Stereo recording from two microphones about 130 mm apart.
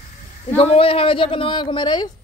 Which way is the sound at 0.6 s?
45° left (ahead or behind).